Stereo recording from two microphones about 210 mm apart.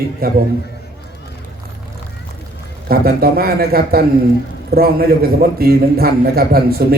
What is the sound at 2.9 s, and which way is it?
A man's voice, 45° right (ahead or behind).